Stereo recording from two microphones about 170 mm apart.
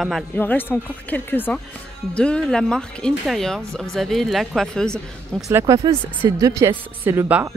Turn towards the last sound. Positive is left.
turn(degrees=-15)  # may be behind; listen again after turning